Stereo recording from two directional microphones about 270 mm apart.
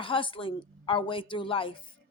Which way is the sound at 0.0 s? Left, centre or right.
Centre.